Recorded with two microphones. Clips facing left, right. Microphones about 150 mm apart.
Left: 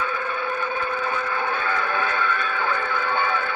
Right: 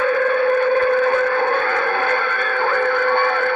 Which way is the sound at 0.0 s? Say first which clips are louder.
Right 11 dB; 60° right (ahead or behind).